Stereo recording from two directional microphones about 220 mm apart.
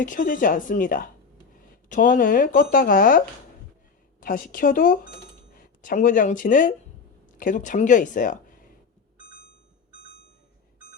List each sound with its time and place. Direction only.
0.0 s speech: 35° left (ahead or behind)